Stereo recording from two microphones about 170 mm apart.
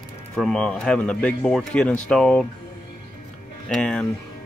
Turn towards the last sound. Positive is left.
turn(degrees=5)  # may be behind; listen again after turning